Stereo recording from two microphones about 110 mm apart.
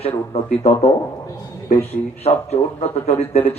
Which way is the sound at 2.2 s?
70° left (ahead or behind).